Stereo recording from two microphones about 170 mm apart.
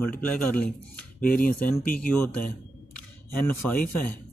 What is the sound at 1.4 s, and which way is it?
Speech, 55° left (ahead or behind).